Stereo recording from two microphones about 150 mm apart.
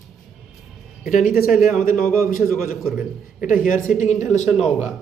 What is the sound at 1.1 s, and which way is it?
Speech, 70° left (ahead or behind).